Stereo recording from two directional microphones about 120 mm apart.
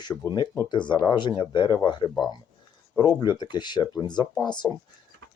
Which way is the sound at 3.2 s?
35° left (ahead or behind).